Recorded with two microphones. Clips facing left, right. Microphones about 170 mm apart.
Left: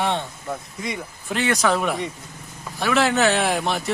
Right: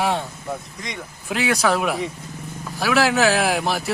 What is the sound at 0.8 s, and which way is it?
A man's voice, 5° left (ahead or behind).